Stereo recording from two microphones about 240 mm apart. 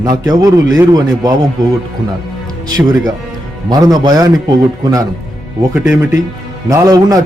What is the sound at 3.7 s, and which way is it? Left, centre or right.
A man's voice, centre.